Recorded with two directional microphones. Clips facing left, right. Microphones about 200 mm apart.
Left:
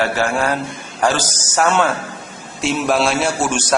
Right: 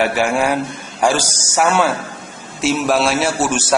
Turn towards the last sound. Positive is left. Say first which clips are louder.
# right 1 dB
turn(degrees=-5)  # may be behind; listen again after turning